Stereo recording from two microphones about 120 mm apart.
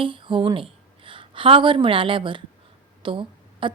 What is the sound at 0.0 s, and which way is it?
A woman's voice, 45° right (ahead or behind).